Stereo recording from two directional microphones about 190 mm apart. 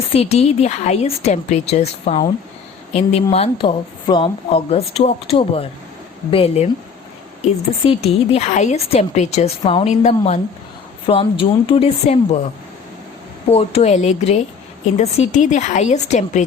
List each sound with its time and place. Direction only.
0.1 s a woman's voice: 30° left (ahead or behind)
7.9 s a woman's voice: 30° left (ahead or behind)
13.5 s a woman's voice: 30° left (ahead or behind)